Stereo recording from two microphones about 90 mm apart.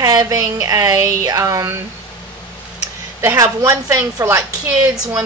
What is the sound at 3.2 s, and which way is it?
A woman's voice, 30° right (ahead or behind).